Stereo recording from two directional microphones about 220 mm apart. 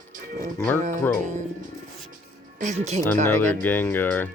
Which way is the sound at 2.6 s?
30° right (ahead or behind).